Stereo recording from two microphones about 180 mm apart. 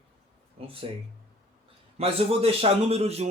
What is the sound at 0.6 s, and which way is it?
Speech, 30° right (ahead or behind).